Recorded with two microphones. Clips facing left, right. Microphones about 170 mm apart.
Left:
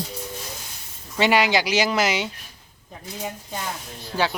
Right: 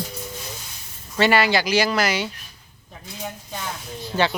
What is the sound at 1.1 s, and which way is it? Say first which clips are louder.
Speech: right 1 dB; 15° left (ahead or behind).